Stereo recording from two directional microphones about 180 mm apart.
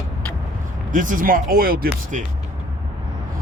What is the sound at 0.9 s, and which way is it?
Speech, 45° right (ahead or behind).